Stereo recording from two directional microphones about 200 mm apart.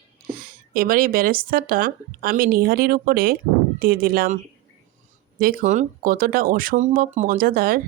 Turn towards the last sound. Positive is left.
turn(degrees=-45)  # may be behind; listen again after turning